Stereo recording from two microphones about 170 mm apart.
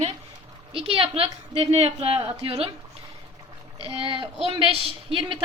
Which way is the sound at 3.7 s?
30° right (ahead or behind).